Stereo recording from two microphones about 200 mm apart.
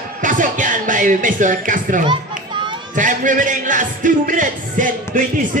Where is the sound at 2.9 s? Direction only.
40° right (ahead or behind).